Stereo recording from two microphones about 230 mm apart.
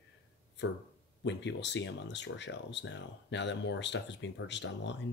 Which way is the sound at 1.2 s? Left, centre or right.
Left.